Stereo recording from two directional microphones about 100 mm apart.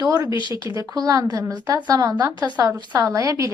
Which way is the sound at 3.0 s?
35° right (ahead or behind).